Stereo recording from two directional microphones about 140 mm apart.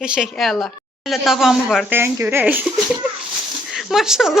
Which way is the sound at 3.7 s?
Centre (ahead or behind).